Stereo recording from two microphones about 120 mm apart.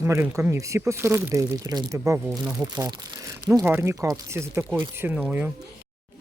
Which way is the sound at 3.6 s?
20° right (ahead or behind).